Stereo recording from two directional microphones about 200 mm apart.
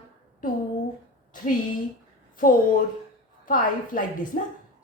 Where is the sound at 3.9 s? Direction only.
40° left (ahead or behind).